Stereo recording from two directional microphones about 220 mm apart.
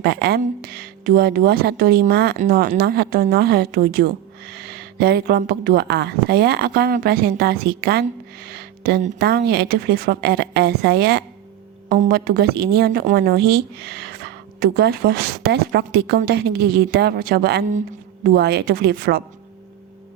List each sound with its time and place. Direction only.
0.0 s a woman's voice: 45° right (ahead or behind)
8.4 s a sound: 45° right (ahead or behind)
9.1 s a woman's voice: 45° right (ahead or behind)